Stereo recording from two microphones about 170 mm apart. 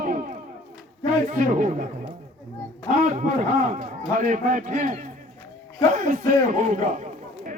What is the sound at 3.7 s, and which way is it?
A man's voice, 50° right (ahead or behind).